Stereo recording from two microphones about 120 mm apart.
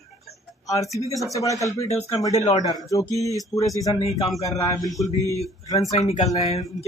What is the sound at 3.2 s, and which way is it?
Speech, 30° left (ahead or behind).